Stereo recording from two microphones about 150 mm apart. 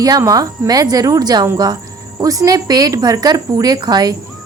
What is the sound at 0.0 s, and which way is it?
Speech, 25° right (ahead or behind).